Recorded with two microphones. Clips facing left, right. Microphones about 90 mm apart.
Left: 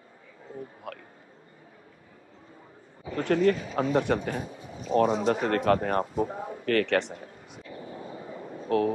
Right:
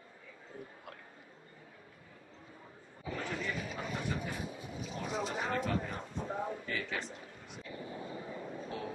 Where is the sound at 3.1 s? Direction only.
70° left (ahead or behind).